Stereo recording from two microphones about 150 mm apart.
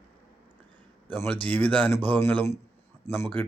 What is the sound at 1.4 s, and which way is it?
Speech, 10° left (ahead or behind).